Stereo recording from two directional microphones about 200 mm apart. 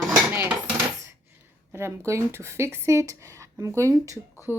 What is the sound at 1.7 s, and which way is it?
A woman's voice, 10° right (ahead or behind).